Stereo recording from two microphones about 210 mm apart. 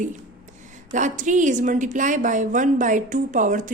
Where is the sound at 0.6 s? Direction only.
35° right (ahead or behind).